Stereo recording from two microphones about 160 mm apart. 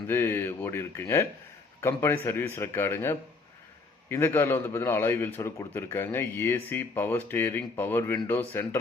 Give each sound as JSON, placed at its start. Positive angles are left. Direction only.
{"t": 0.1, "sound": "a man's voice", "side_deg": 15}